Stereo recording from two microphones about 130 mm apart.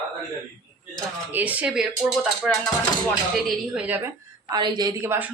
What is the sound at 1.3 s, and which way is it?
Speech, 15° right (ahead or behind).